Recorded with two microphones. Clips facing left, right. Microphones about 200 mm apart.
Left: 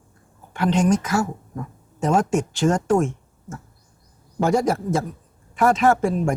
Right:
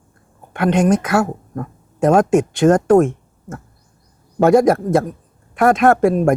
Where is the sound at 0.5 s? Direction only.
60° right (ahead or behind).